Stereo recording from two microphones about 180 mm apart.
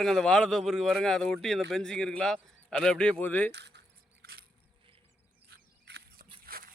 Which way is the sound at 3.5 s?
70° right (ahead or behind).